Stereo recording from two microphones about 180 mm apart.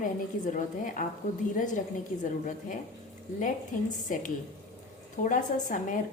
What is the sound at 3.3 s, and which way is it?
A woman's voice, 45° left (ahead or behind).